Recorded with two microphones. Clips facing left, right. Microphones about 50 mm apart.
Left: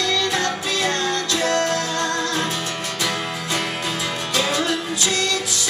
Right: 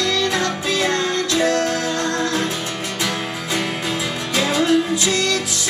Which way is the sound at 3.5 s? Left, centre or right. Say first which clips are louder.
Right 3 dB; centre.